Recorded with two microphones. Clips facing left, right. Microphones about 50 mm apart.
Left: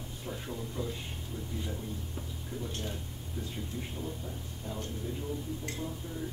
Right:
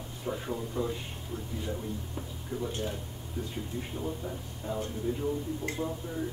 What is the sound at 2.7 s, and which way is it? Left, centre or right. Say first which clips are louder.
Speech: right 4 dB; centre.